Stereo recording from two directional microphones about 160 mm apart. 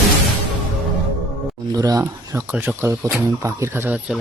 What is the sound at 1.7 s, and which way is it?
Speech, 20° right (ahead or behind).